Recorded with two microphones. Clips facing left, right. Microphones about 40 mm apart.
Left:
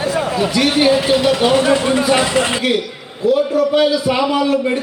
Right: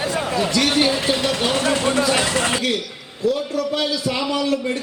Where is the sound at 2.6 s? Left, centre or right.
Centre.